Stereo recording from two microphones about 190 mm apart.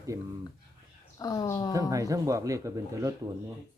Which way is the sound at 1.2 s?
20° left (ahead or behind).